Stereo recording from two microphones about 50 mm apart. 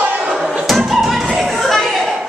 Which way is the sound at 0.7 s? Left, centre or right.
Centre.